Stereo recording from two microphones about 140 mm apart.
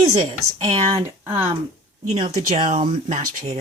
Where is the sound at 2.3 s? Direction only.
60° right (ahead or behind).